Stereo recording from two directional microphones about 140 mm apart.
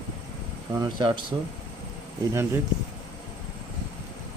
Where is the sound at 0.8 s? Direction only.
35° right (ahead or behind).